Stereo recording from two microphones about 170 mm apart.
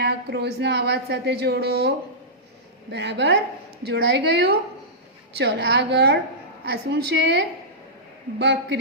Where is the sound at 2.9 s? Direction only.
90° right.